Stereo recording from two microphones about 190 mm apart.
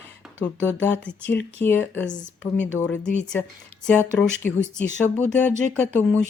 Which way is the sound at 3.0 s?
40° left (ahead or behind).